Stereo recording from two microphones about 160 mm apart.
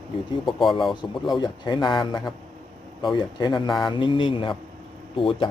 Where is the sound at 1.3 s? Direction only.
30° left (ahead or behind).